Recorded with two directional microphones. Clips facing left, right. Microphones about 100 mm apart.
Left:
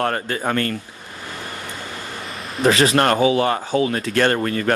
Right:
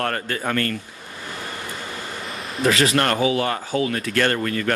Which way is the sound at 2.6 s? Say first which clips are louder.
Left 3 dB; 30° left (ahead or behind).